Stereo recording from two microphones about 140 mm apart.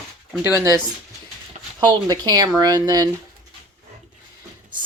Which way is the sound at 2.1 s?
30° right (ahead or behind).